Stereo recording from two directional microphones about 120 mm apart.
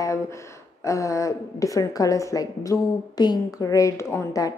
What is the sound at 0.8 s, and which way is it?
A woman's voice, 25° left (ahead or behind).